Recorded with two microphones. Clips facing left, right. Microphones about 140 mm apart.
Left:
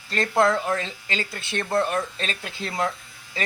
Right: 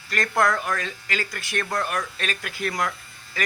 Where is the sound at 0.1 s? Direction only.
25° left (ahead or behind).